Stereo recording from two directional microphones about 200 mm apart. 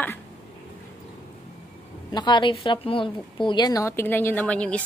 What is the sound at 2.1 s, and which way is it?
A woman's voice, 20° left (ahead or behind).